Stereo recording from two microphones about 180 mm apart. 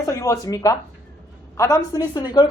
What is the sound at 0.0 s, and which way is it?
Speech, 20° left (ahead or behind).